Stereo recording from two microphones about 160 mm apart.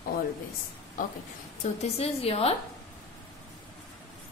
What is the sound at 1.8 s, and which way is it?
Speech, 40° left (ahead or behind).